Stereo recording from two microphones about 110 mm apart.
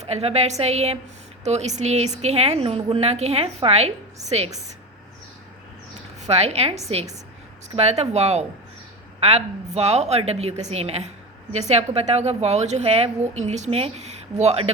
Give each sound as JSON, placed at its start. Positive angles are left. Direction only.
{"t": 0.0, "sound": "a woman's voice", "side_deg": -70}
{"t": 1.5, "sound": "a woman's voice", "side_deg": -90}
{"t": 6.2, "sound": "a woman's voice", "side_deg": -80}